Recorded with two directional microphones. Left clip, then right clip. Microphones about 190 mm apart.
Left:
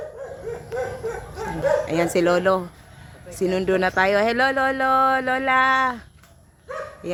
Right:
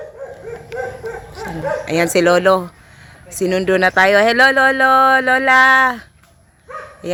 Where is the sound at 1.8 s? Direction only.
40° right (ahead or behind).